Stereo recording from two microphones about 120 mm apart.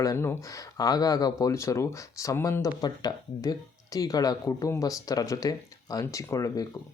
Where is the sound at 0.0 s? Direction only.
25° left (ahead or behind).